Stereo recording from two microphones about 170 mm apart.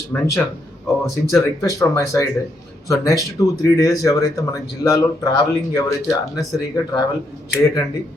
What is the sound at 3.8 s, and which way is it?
Speech, 20° left (ahead or behind).